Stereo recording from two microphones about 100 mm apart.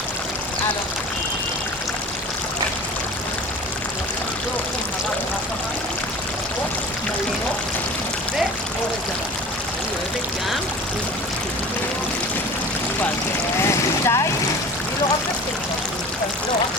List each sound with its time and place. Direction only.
13.6 s speech: 30° left (ahead or behind)